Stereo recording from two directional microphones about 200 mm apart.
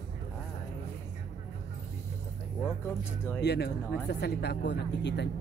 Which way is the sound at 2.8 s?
10° left (ahead or behind).